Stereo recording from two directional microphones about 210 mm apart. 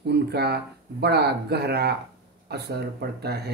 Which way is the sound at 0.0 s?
50° right (ahead or behind).